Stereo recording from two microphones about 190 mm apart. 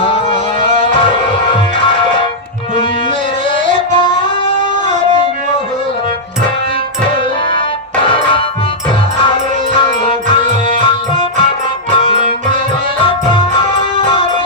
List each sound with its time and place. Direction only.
0.9 s music: 25° left (ahead or behind)
3.5 s music: 25° left (ahead or behind)
8.1 s music: 25° left (ahead or behind)
10.8 s music: 25° left (ahead or behind)